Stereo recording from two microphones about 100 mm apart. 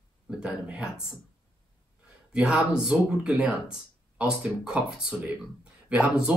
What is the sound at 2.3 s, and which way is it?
Speech, 10° right (ahead or behind).